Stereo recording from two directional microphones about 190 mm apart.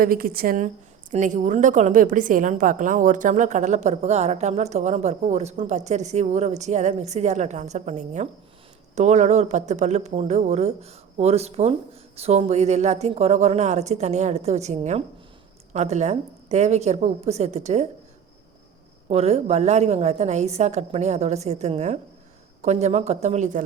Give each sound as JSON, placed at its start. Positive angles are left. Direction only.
{"t": 0.0, "sound": "a woman's voice", "side_deg": -50}
{"t": 19.0, "sound": "a woman's voice", "side_deg": -35}